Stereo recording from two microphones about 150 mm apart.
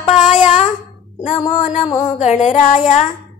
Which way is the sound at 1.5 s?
50° left (ahead or behind).